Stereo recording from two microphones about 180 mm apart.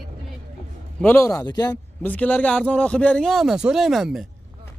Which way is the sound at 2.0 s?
10° left (ahead or behind).